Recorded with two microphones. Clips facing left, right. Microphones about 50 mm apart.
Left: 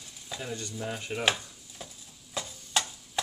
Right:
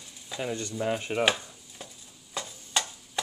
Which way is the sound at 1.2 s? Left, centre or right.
Centre.